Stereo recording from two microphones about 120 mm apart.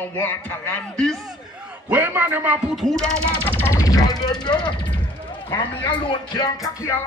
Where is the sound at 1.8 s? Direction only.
15° right (ahead or behind); by 4.7 s 40° left (ahead or behind).